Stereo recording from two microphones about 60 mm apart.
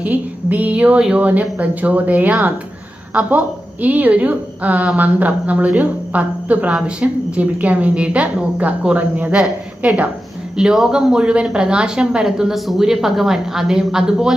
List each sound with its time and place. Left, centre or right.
0.0 s a woman's voice: right
10.6 s speech: centre